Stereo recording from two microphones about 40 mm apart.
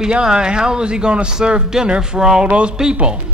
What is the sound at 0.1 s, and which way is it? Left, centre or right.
Speech, centre.